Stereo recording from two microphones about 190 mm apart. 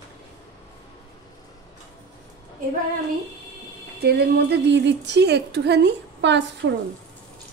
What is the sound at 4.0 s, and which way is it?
A woman's voice, 60° right (ahead or behind).